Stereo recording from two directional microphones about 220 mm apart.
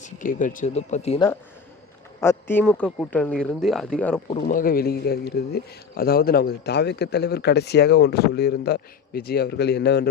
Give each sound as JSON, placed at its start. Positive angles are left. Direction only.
{"t": 0.0, "sound": "speech", "side_deg": 35}
{"t": 2.2, "sound": "speech", "side_deg": 10}
{"t": 4.4, "sound": "speech", "side_deg": 40}